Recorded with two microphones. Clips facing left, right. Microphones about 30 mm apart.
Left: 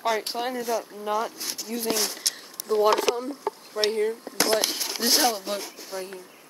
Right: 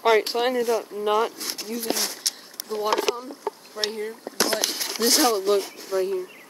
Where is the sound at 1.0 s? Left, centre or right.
Right.